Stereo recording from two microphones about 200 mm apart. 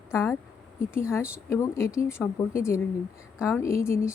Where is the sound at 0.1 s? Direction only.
15° left (ahead or behind).